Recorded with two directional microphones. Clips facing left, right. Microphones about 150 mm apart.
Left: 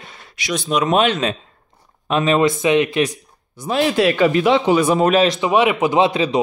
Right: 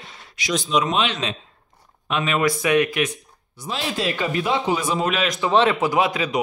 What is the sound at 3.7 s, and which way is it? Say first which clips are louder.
A man's voice: left 9 dB; 65° left (ahead or behind).